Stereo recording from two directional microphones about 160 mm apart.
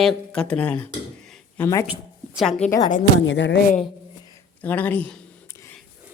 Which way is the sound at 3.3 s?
90° left.